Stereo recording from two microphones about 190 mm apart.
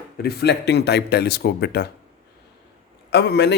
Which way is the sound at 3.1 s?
65° left (ahead or behind).